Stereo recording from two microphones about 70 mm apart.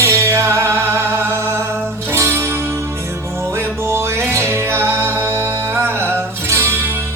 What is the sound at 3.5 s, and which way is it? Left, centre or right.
Music, right.